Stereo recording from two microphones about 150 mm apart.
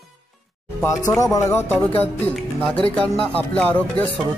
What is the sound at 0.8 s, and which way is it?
Speech, 20° left (ahead or behind).